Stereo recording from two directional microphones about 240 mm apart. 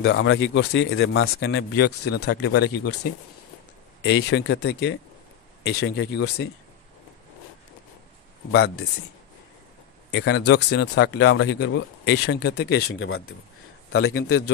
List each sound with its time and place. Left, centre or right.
0.0 s speech: left
8.5 s speech: left
10.1 s speech: left
12.7 s speech: left
13.9 s speech: left